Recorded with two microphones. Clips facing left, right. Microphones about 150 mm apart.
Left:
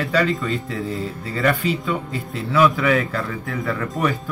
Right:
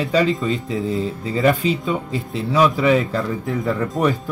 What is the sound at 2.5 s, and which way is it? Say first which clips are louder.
A man's voice: right 1 dB; 35° right (ahead or behind).